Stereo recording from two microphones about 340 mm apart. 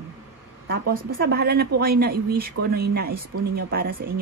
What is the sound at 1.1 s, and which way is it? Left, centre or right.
A man's voice, right.